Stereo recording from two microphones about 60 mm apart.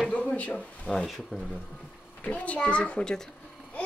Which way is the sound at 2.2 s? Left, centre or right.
Left.